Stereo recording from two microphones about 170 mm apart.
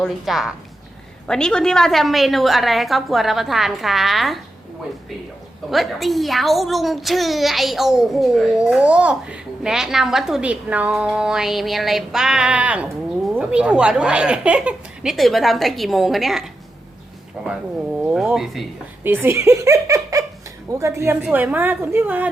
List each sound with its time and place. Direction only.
0.0 s a child's voice: centre (ahead or behind)
5.7 s a child's voice: centre (ahead or behind)
19.0 s speech: 10° right (ahead or behind)